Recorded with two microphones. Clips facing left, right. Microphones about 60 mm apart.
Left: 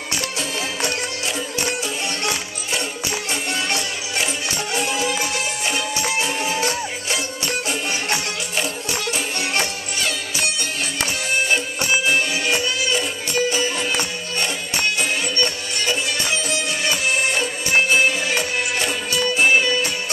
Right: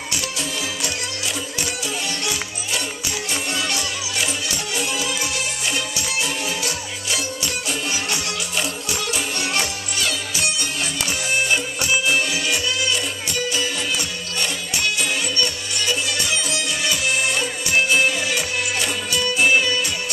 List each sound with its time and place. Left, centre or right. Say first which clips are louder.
0.1 s music: left 2 dB; left
2.2 s music: left 2 dB; left
12.4 s music: left 1 dB; left
19.2 s music: left 1 dB; centre